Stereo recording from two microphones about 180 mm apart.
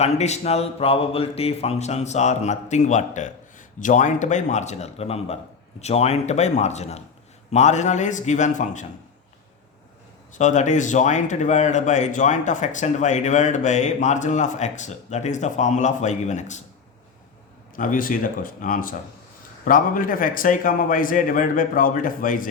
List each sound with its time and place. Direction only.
0.0 s speech: 35° left (ahead or behind)
10.3 s speech: 45° left (ahead or behind)
17.7 s a man's voice: 50° left (ahead or behind)